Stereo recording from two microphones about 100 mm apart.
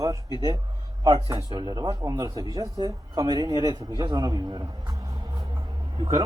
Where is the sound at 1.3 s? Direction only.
40° right (ahead or behind).